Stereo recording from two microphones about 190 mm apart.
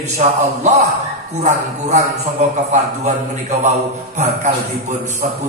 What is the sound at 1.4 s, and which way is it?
Speech, 35° right (ahead or behind).